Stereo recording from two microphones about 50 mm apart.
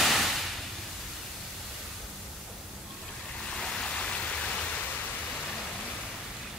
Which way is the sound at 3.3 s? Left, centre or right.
Centre.